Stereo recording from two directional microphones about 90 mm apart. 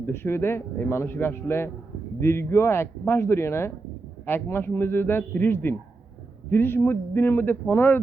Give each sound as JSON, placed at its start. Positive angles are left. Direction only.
{"t": 0.0, "sound": "speech", "side_deg": 25}